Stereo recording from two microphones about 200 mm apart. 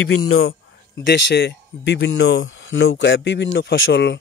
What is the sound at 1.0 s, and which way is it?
A man's voice, 55° left (ahead or behind).